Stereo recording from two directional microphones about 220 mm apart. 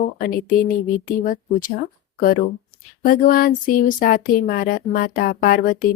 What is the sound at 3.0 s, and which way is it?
Speech, 40° left (ahead or behind).